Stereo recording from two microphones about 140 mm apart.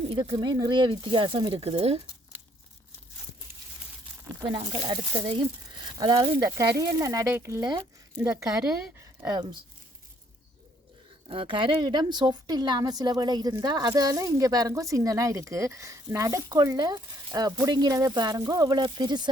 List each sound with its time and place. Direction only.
0.1 s speech: 35° right (ahead or behind)
5.4 s a woman's voice: 30° right (ahead or behind)
11.3 s a woman's voice: 40° right (ahead or behind)